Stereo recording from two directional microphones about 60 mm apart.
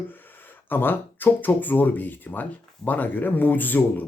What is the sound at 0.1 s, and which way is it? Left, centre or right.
Speech, left.